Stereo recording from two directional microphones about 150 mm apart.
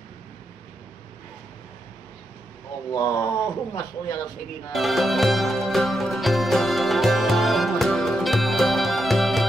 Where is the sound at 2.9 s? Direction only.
25° left (ahead or behind).